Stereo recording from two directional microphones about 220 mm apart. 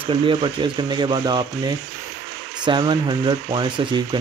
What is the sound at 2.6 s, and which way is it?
Speech, 20° right (ahead or behind).